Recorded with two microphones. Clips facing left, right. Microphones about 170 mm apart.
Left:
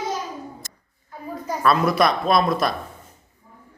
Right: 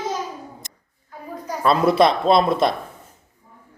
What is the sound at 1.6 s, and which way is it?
Speech, 25° right (ahead or behind).